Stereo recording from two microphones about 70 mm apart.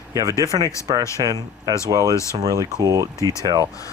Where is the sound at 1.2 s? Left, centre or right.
Right.